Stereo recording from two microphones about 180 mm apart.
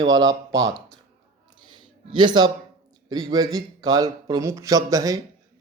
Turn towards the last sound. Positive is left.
turn(degrees=-20)  # may be behind; listen again after turning